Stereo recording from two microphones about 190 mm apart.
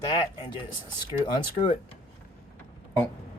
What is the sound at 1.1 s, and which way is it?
Speech, 25° left (ahead or behind).